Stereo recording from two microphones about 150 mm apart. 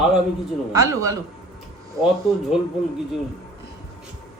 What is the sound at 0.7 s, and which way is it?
Speech, 20° right (ahead or behind).